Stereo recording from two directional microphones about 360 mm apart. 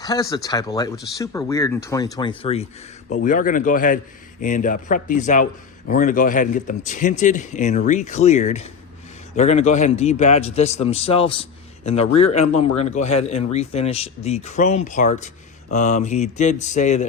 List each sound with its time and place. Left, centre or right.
0.0 s speech: centre